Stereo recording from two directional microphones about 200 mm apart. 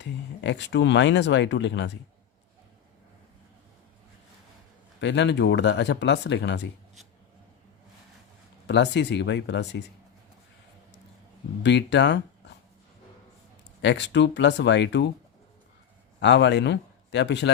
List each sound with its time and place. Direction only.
0.0 s speech: 60° left (ahead or behind)
4.9 s speech: 60° left (ahead or behind)
8.6 s speech: 60° left (ahead or behind)
11.6 s speech: 60° left (ahead or behind)
13.8 s speech: 60° left (ahead or behind)
16.2 s a man's voice: 60° left (ahead or behind)